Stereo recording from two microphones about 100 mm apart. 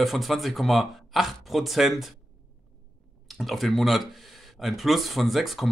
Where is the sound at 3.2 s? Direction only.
Centre (ahead or behind).